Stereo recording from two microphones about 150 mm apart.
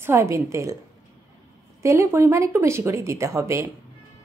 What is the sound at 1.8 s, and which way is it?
A woman's voice, 20° right (ahead or behind).